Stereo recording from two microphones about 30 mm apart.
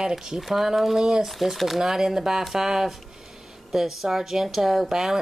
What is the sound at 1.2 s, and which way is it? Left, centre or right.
Speech, centre.